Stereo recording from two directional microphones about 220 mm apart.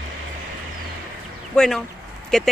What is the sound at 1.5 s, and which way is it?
Speech, 5° left (ahead or behind).